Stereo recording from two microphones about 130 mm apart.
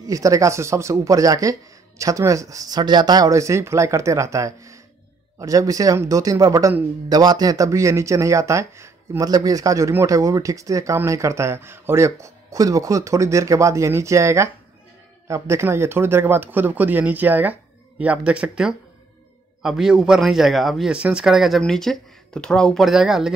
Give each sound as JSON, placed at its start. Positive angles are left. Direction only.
{"t": 0.0, "sound": "speech", "side_deg": -25}